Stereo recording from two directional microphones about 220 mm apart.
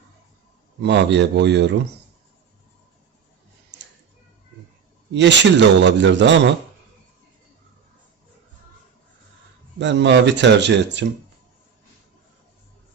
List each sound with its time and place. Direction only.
0.8 s a man's voice: 50° right (ahead or behind)
5.1 s a man's voice: 55° right (ahead or behind)
9.7 s a man's voice: 55° right (ahead or behind)